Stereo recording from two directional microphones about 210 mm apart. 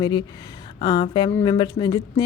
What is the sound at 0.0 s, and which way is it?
Speech, 20° left (ahead or behind).